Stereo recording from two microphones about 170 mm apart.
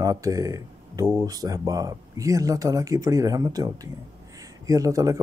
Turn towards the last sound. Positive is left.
turn(degrees=-20)  # may be behind; listen again after turning